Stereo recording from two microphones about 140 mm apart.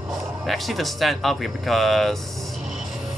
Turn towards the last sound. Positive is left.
turn(degrees=0)  # may be behind; listen again after turning